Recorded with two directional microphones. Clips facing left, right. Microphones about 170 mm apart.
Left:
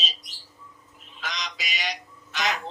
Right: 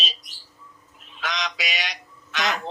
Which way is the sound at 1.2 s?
75° right (ahead or behind).